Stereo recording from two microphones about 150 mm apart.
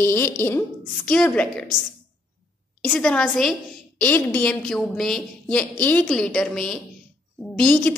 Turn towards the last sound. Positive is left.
turn(degrees=10)  # may be behind; listen again after turning